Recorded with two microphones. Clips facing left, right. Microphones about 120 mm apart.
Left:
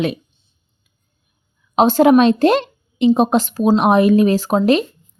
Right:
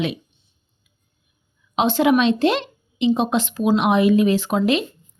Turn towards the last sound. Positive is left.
turn(degrees=40)  # may be behind; listen again after turning